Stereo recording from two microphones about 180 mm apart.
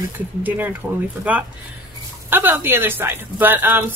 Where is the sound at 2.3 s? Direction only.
10° right (ahead or behind).